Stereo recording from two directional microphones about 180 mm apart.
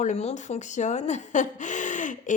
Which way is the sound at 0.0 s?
40° left (ahead or behind).